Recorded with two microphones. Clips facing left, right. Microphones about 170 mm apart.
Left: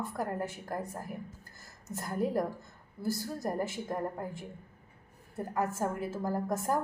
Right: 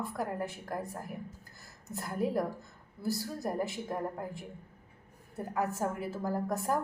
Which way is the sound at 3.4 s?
5° right (ahead or behind).